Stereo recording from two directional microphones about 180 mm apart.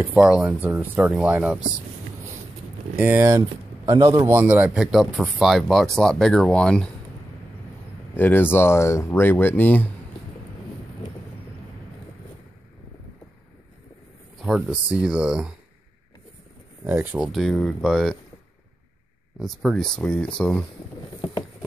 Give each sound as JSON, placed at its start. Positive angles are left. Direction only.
{"t": 0.0, "sound": "speech", "side_deg": -5}
{"t": 3.0, "sound": "speech", "side_deg": -10}
{"t": 4.3, "sound": "speech", "side_deg": -10}
{"t": 8.2, "sound": "speech", "side_deg": 10}
{"t": 14.4, "sound": "speech", "side_deg": -5}
{"t": 16.8, "sound": "speech", "side_deg": -10}
{"t": 17.2, "sound": "speech", "side_deg": 0}
{"t": 19.3, "sound": "speech", "side_deg": 0}